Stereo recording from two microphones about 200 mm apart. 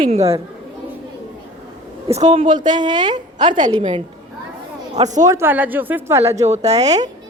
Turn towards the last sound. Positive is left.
turn(degrees=-35)  # may be behind; listen again after turning